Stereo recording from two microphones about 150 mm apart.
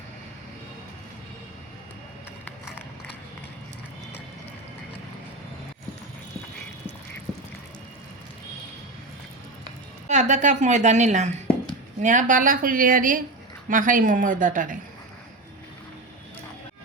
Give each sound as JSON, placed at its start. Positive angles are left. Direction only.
{"t": 10.1, "sound": "a woman's voice", "side_deg": -55}